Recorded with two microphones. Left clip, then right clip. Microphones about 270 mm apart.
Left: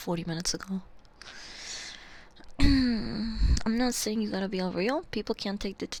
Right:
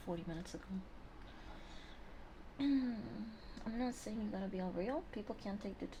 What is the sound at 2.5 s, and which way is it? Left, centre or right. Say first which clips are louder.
Throat clearing: left 11 dB; left.